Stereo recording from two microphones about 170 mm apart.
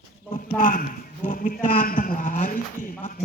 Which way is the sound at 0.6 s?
55° left (ahead or behind).